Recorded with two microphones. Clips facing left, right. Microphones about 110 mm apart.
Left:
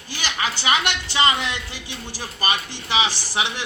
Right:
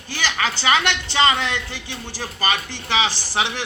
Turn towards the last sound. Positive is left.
turn(degrees=15)  # may be behind; listen again after turning